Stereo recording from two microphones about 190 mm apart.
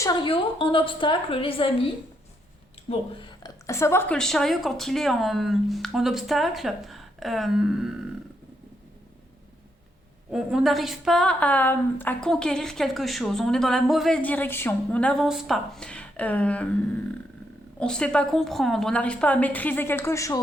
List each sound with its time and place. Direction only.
0.0 s a woman's voice: 20° left (ahead or behind)
2.9 s speech: 25° left (ahead or behind)
3.7 s a woman's voice: 15° left (ahead or behind); by 8.1 s centre (ahead or behind)
10.3 s a woman's voice: centre (ahead or behind)
17.7 s a woman's voice: 5° left (ahead or behind)